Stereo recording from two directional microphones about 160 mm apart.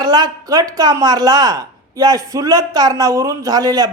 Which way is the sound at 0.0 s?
25° right (ahead or behind).